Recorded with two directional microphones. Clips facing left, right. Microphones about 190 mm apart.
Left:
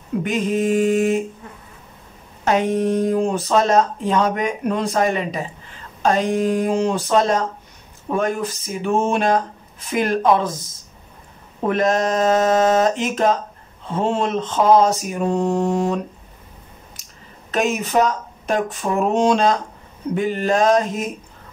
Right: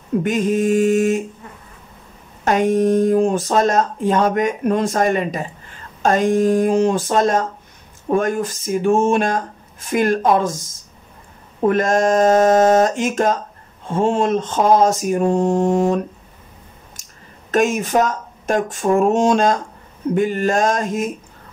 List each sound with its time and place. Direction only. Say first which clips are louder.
0.2 s speech: right 2 dB; 45° right (ahead or behind)
2.4 s speech: right 3 dB; 45° right (ahead or behind)
11.7 s speech: right 2 dB; 45° right (ahead or behind)
17.5 s speech: right 4 dB; 45° right (ahead or behind)